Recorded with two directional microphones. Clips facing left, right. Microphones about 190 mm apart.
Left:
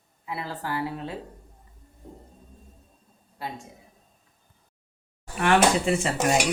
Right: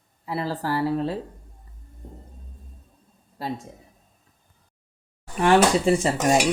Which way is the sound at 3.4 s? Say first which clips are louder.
Right 5 dB; 35° right (ahead or behind).